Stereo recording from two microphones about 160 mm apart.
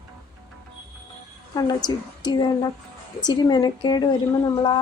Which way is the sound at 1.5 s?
25° left (ahead or behind).